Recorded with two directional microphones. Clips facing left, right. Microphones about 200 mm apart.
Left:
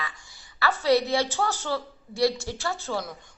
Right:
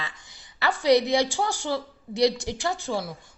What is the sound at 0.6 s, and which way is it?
A woman's voice, 15° right (ahead or behind).